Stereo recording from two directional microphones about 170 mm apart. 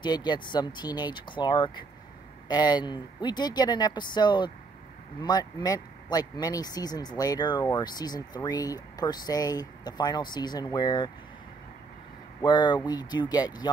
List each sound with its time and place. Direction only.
0.0 s speech: 25° left (ahead or behind)
12.4 s speech: 25° left (ahead or behind)